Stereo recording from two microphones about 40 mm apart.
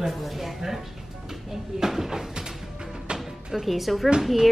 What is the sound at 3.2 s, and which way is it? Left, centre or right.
A woman's voice, centre.